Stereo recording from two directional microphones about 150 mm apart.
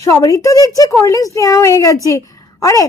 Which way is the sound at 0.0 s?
20° left (ahead or behind).